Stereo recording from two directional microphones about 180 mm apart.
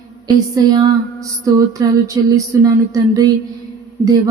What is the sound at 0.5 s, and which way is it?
Music, 20° right (ahead or behind).